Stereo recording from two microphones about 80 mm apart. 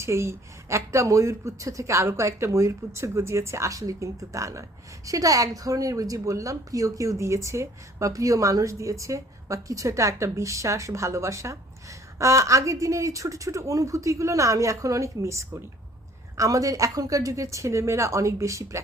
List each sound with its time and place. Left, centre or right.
0.0 s speech: right